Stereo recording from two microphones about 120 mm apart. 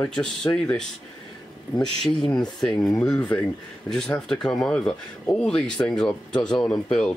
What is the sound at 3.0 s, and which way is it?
Speech, 10° left (ahead or behind).